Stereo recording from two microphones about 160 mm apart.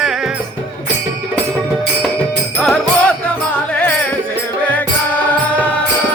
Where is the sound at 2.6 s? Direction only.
5° left (ahead or behind).